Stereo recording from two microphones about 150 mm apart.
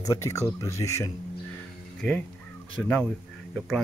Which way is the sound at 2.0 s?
5° left (ahead or behind).